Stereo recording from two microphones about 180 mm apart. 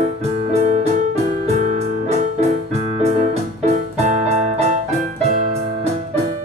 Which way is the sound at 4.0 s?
40° right (ahead or behind).